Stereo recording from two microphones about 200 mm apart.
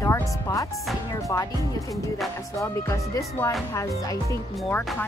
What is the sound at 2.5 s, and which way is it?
Speech, 15° left (ahead or behind).